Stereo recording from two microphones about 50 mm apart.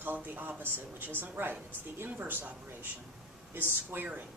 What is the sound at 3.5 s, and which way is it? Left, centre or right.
Speech, right.